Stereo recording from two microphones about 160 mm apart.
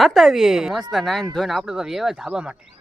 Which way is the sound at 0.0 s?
Centre (ahead or behind).